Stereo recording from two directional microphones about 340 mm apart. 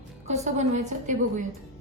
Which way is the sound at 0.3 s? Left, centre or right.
Centre.